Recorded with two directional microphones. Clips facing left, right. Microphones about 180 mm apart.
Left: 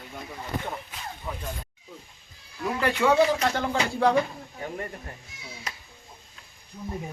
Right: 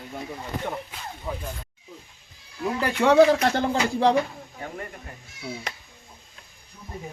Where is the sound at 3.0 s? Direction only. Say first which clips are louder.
Right 5 dB; 40° right (ahead or behind).